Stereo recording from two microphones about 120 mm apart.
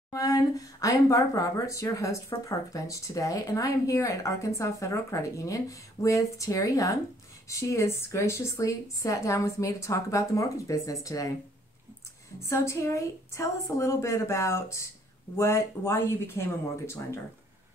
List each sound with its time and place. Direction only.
0.1 s speech: 30° left (ahead or behind)
12.4 s speech: 25° left (ahead or behind)